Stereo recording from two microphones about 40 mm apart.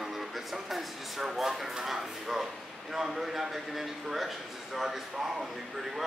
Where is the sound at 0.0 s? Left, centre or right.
Centre.